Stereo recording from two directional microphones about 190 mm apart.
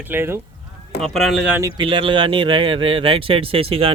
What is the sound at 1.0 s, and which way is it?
Speech, centre (ahead or behind).